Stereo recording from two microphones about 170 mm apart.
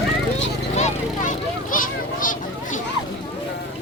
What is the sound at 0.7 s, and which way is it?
Vehicle, 40° left (ahead or behind).